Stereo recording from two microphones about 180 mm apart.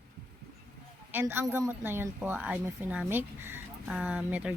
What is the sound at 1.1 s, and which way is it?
A woman's voice, 15° right (ahead or behind).